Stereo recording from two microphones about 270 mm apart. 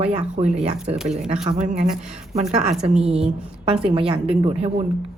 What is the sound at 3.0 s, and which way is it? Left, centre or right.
A woman's voice, right.